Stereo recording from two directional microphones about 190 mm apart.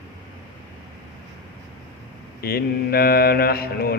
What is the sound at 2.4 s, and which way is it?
A man's voice, 55° left (ahead or behind).